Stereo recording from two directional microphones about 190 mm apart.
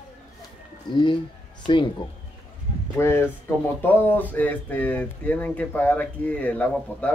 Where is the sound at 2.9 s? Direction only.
15° left (ahead or behind).